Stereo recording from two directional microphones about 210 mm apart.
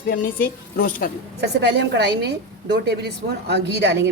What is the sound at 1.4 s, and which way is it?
A woman's voice, 55° right (ahead or behind).